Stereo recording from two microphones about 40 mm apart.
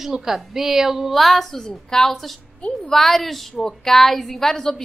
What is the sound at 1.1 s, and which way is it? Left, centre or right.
Speech, centre.